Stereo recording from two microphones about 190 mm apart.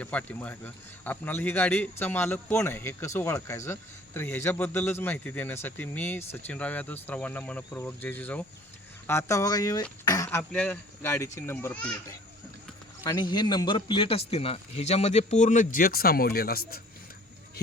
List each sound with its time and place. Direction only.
0.0 s a man's voice: 5° left (ahead or behind)
13.1 s speech: 25° left (ahead or behind); by 16.8 s 50° left (ahead or behind)